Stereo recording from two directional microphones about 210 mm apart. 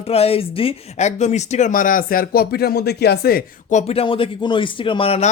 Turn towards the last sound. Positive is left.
turn(degrees=25)  # may be behind; listen again after turning